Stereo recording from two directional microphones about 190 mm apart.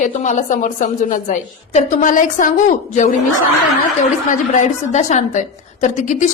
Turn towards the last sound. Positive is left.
turn(degrees=40)  # may be behind; listen again after turning